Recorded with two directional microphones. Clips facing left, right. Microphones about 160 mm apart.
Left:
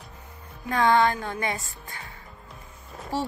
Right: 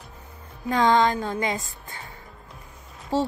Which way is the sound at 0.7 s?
20° right (ahead or behind).